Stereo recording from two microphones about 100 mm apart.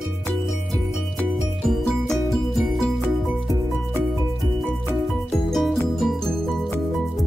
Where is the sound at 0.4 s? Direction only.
Centre (ahead or behind).